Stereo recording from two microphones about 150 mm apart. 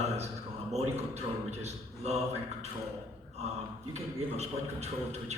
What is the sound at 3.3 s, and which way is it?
A man's voice, 45° right (ahead or behind).